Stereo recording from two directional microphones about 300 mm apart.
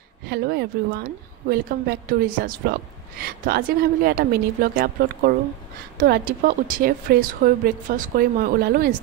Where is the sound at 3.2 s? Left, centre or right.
Right.